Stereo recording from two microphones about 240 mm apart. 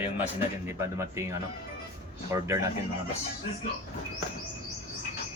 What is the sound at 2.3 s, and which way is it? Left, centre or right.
Speech, centre.